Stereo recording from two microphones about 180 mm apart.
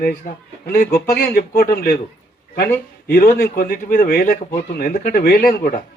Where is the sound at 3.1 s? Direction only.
55° left (ahead or behind).